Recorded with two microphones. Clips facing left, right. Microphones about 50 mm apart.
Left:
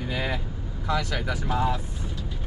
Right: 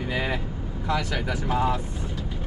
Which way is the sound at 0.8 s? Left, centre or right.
Centre.